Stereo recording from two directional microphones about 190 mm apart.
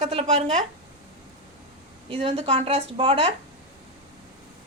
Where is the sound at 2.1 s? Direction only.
30° right (ahead or behind).